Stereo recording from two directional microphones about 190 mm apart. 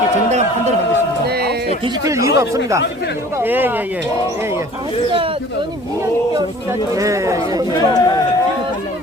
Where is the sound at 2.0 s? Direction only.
15° right (ahead or behind).